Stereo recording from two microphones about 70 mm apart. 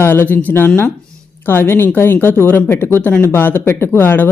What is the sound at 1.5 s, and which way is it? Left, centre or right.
Speech, left.